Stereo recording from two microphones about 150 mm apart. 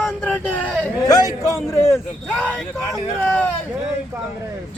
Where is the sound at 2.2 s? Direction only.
10° left (ahead or behind).